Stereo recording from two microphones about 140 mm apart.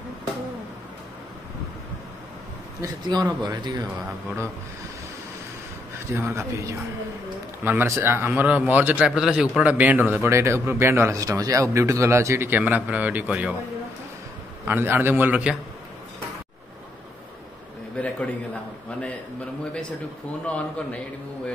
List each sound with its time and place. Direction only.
2.8 s speech: 25° right (ahead or behind)
6.1 s speech: 20° right (ahead or behind)
14.6 s speech: 15° right (ahead or behind)
17.9 s a man's voice: 10° left (ahead or behind)
20.4 s a man's voice: 10° left (ahead or behind)